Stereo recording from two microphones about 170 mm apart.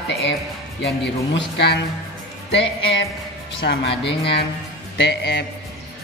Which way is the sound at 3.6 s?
85° left.